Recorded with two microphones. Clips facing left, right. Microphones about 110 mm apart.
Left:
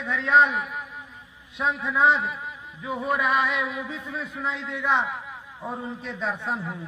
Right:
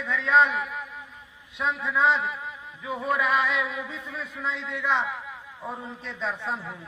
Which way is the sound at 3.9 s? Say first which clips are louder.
Left 3 dB; 30° left (ahead or behind).